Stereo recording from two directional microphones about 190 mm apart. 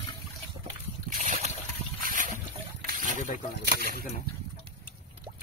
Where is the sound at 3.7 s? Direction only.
55° right (ahead or behind).